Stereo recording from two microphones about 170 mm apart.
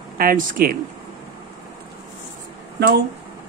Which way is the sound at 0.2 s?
55° right (ahead or behind).